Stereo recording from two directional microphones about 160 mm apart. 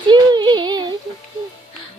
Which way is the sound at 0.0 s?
30° right (ahead or behind).